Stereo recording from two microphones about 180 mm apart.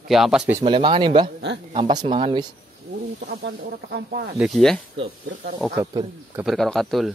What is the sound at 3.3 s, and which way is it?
Speech, 65° right (ahead or behind).